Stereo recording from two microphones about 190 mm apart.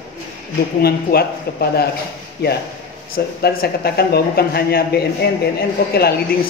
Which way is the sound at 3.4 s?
55° left (ahead or behind).